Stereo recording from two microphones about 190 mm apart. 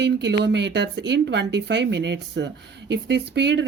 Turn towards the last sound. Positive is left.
turn(degrees=-65)  # may be behind; listen again after turning